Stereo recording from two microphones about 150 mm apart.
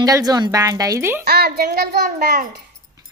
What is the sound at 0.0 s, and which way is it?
Speech, 25° right (ahead or behind).